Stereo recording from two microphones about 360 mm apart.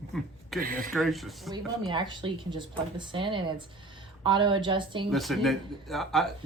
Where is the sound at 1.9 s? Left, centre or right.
Centre.